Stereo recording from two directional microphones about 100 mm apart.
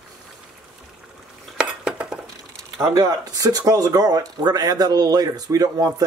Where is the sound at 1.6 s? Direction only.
10° right (ahead or behind).